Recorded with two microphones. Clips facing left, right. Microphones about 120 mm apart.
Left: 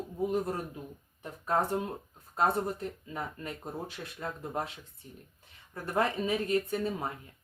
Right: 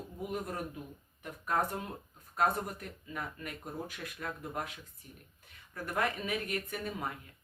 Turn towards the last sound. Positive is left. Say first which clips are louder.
# left 6 dB
turn(degrees=30)  # may be behind; listen again after turning